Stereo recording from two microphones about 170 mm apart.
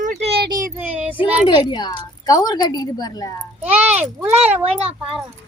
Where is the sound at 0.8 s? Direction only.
10° right (ahead or behind).